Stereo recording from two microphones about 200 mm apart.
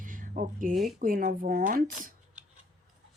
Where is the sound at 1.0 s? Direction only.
45° right (ahead or behind).